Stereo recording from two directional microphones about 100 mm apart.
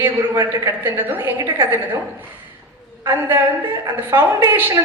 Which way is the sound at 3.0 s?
25° right (ahead or behind).